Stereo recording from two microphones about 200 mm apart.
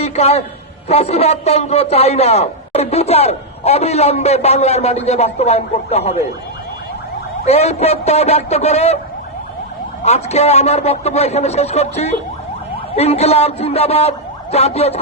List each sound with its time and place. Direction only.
0.0 s a man's voice: 30° left (ahead or behind)
7.4 s a man's voice: 30° left (ahead or behind)
10.0 s a man's voice: 30° left (ahead or behind)